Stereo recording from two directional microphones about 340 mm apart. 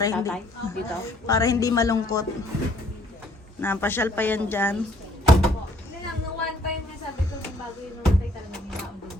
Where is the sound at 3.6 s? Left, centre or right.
Centre.